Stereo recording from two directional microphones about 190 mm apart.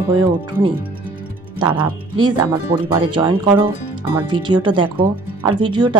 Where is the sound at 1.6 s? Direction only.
25° right (ahead or behind).